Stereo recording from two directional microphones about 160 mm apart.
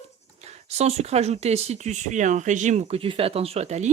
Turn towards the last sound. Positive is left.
turn(degrees=-45)  # may be behind; listen again after turning